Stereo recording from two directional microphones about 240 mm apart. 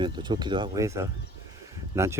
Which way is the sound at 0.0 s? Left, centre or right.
Centre.